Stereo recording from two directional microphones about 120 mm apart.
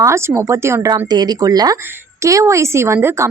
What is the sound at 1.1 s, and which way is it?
A woman's voice, 35° right (ahead or behind).